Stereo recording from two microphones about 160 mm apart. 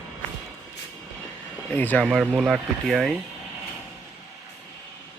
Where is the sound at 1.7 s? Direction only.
10° left (ahead or behind).